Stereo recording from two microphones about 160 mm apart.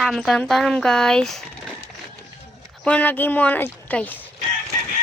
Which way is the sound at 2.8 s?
10° left (ahead or behind).